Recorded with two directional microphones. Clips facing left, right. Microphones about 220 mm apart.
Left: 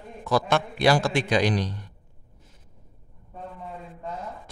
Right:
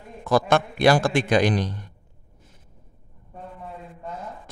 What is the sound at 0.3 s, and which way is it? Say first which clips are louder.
A man's voice: right 3 dB; 50° right (ahead or behind).